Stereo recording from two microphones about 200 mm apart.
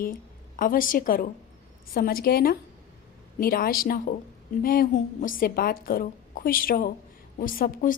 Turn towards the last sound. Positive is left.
turn(degrees=45)  # may be behind; listen again after turning